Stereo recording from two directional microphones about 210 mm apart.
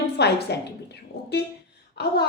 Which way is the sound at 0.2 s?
50° left (ahead or behind).